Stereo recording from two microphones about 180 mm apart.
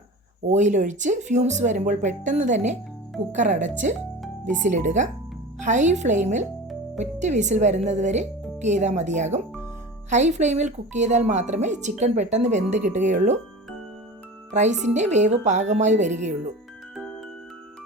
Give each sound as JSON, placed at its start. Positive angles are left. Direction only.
{"t": 0.4, "sound": "speech", "side_deg": -40}
{"t": 14.5, "sound": "speech", "side_deg": -40}